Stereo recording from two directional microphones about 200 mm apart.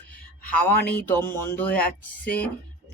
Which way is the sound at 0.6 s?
10° left (ahead or behind).